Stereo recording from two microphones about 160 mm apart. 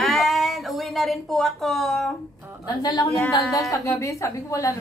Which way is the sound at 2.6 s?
25° left (ahead or behind).